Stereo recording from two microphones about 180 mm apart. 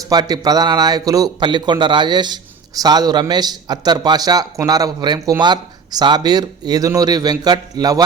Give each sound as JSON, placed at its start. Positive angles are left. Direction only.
{"t": 0.1, "sound": "a man's voice", "side_deg": -20}